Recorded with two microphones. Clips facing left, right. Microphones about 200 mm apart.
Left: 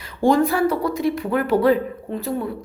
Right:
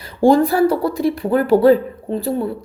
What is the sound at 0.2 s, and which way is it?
A woman's voice, 35° right (ahead or behind).